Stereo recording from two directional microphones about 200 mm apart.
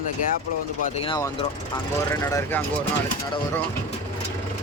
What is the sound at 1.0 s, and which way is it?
Speech, 25° left (ahead or behind).